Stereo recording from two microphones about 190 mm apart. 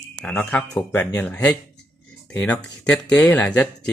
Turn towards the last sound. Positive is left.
turn(degrees=5)  # may be behind; listen again after turning